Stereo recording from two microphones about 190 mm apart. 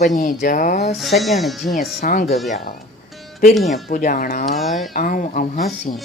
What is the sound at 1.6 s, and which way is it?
Speech, 40° left (ahead or behind).